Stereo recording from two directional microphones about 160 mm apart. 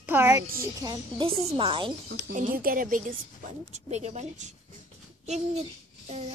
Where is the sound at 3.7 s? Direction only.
45° right (ahead or behind).